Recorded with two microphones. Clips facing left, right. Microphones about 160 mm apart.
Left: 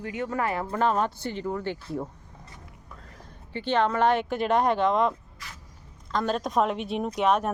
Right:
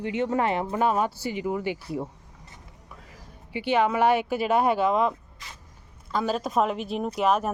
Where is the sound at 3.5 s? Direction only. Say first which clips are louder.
Right 1 dB; 10° right (ahead or behind).